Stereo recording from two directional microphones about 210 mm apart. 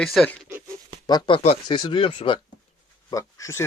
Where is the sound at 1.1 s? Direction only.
20° left (ahead or behind).